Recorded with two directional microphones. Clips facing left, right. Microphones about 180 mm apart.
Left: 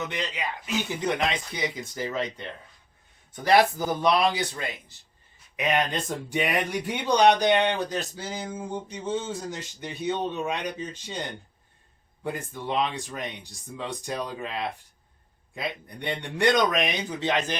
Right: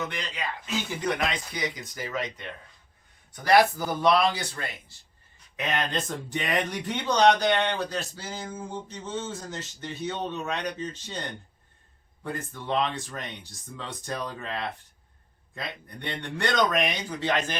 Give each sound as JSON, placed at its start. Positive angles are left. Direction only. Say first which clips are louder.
{"t": 0.1, "sound": "speech", "louder": "left 3 dB", "side_deg": 15}
{"t": 12.2, "sound": "speech", "louder": "left 2 dB", "side_deg": 10}